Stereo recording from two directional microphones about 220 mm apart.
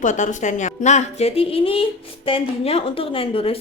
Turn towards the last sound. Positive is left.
turn(degrees=25)  # may be behind; listen again after turning